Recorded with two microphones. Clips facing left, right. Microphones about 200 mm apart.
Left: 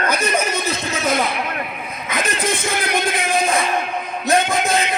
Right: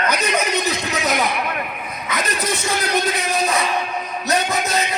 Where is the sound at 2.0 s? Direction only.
50° left (ahead or behind).